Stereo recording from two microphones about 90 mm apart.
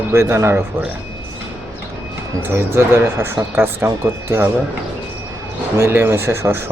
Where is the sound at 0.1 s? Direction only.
30° right (ahead or behind).